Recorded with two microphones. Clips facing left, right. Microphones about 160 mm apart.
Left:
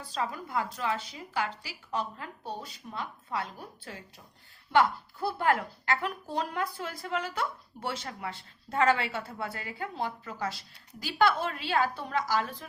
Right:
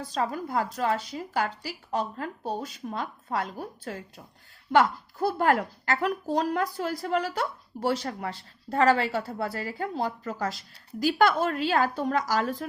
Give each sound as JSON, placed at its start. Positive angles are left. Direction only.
{"t": 0.0, "sound": "a woman's voice", "side_deg": -45}